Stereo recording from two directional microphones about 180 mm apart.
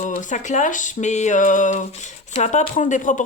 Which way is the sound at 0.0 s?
45° left (ahead or behind).